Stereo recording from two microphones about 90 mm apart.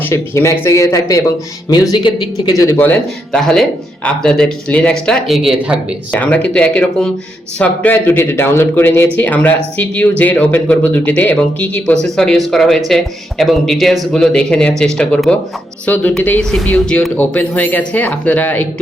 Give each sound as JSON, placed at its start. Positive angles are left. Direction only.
{"t": 0.0, "sound": "speech", "side_deg": 30}
{"t": 1.7, "sound": "speech", "side_deg": 50}
{"t": 2.7, "sound": "speech", "side_deg": 20}
{"t": 3.3, "sound": "speech", "side_deg": 5}
{"t": 5.2, "sound": "speech", "side_deg": 0}
{"t": 6.1, "sound": "speech", "side_deg": 15}
{"t": 16.4, "sound": "speech", "side_deg": 5}